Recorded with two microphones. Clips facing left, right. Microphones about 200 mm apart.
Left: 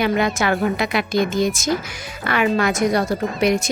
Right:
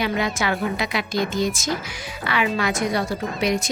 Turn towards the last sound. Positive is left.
turn(degrees=50)  # may be behind; listen again after turning